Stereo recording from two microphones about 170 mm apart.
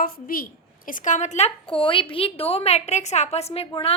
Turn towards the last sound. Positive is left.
turn(degrees=35)  # may be behind; listen again after turning